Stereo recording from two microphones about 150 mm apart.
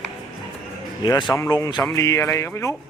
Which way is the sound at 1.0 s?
30° left (ahead or behind).